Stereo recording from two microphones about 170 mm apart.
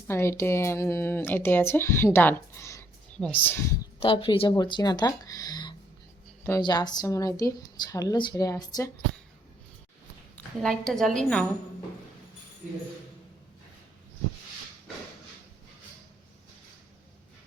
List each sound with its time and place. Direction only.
0.1 s speech: 15° left (ahead or behind)
4.0 s speech: 30° left (ahead or behind)
10.3 s a woman's voice: 5° left (ahead or behind)